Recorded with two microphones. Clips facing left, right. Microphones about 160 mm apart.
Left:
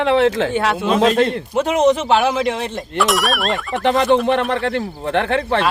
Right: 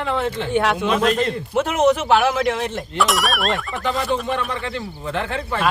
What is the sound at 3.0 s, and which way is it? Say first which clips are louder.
Speech: left 2 dB; centre (ahead or behind).